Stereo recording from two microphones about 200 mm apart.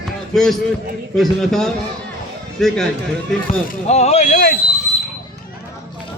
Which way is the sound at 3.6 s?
40° left (ahead or behind).